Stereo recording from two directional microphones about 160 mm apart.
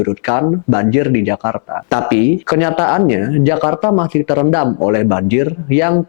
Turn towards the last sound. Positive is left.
turn(degrees=15)  # may be behind; listen again after turning